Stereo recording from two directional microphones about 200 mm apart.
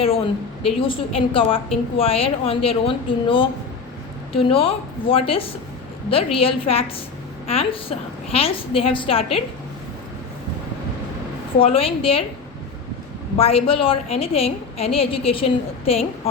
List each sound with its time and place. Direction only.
0.6 s a woman's voice: 25° left (ahead or behind)
11.6 s a woman's voice: 30° left (ahead or behind)
13.3 s a woman's voice: 30° left (ahead or behind)